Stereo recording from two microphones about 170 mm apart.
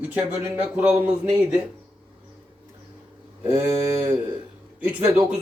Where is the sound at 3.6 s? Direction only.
20° right (ahead or behind).